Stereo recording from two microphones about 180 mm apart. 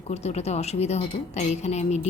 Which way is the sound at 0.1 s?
35° left (ahead or behind).